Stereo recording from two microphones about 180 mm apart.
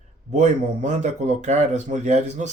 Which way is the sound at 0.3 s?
40° right (ahead or behind).